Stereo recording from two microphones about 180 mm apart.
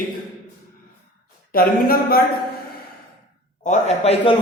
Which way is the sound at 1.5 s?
55° left (ahead or behind).